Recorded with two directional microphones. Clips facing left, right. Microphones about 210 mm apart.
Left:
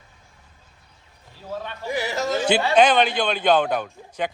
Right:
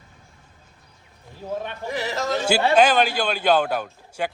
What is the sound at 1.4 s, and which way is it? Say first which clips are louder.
Speech: right 3 dB; 20° right (ahead or behind).